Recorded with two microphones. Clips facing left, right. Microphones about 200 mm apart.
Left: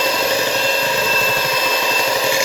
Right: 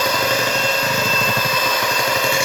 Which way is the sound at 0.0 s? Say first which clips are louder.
Left 1 dB; 30° left (ahead or behind).